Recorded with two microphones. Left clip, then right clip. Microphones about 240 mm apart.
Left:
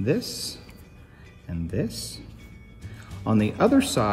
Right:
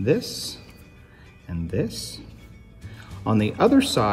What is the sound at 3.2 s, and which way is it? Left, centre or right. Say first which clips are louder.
Speech: right 2 dB; centre.